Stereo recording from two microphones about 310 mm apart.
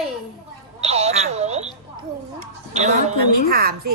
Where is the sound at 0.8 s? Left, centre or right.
Centre.